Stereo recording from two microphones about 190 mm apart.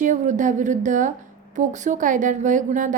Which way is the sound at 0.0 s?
40° right (ahead or behind).